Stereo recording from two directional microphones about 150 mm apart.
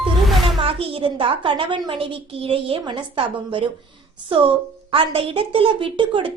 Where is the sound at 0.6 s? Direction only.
40° right (ahead or behind).